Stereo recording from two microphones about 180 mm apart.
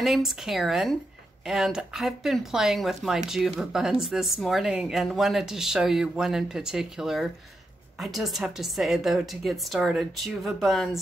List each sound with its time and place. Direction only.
0.0 s speech: centre (ahead or behind)